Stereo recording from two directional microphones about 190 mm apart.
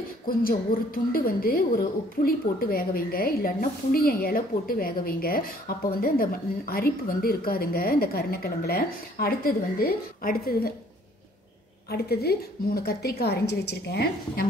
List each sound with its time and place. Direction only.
0.3 s a woman's voice: 50° left (ahead or behind)
11.9 s a woman's voice: 55° left (ahead or behind)